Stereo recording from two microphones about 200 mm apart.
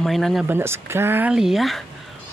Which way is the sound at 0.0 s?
Centre (ahead or behind).